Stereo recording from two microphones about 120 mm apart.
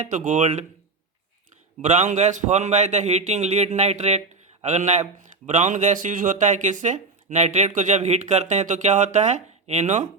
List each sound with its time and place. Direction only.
0.0 s a man's voice: 90° right
1.8 s a man's voice: 80° right